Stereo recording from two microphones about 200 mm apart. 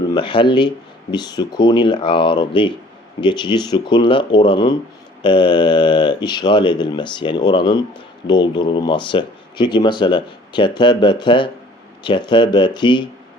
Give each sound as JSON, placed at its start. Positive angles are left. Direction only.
{"t": 0.1, "sound": "speech", "side_deg": 25}